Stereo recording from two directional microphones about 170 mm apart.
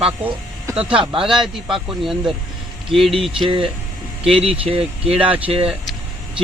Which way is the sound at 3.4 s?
30° right (ahead or behind).